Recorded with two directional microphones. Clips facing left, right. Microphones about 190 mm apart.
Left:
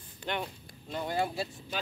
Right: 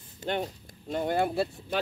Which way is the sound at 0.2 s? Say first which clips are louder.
Right 5 dB; 40° right (ahead or behind).